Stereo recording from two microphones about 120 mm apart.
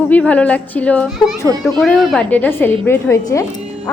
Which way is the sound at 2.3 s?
15° left (ahead or behind).